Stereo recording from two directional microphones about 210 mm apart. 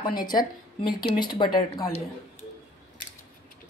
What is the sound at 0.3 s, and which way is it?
A woman's voice, 20° left (ahead or behind).